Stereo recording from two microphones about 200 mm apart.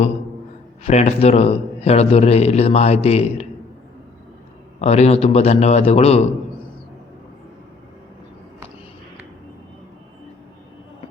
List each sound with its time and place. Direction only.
0.9 s a man's voice: 30° left (ahead or behind)
4.8 s a man's voice: 30° left (ahead or behind)